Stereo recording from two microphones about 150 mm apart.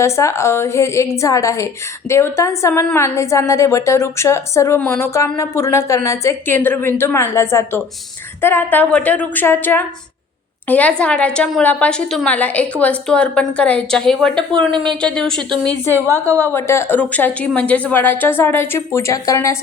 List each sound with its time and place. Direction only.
0.0 s a woman's voice: 20° left (ahead or behind); by 14.3 s 5° left (ahead or behind)
14.7 s speech: 30° right (ahead or behind)
15.1 s a woman's voice: 5° left (ahead or behind)
15.4 s a woman's voice: 30° right (ahead or behind)
16.5 s a woman's voice: 15° left (ahead or behind)